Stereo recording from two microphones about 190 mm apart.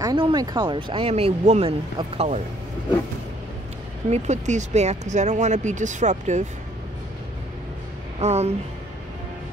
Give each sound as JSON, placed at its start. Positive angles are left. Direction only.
{"t": 0.0, "sound": "speech", "side_deg": -25}
{"t": 4.1, "sound": "speech", "side_deg": -40}
{"t": 8.2, "sound": "speech", "side_deg": -35}